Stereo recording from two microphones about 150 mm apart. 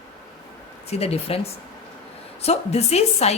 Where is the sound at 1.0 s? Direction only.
40° left (ahead or behind).